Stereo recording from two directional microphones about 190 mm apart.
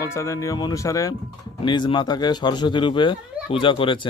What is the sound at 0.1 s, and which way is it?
Speech, 15° left (ahead or behind).